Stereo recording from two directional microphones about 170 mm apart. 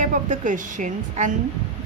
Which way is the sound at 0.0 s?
50° right (ahead or behind).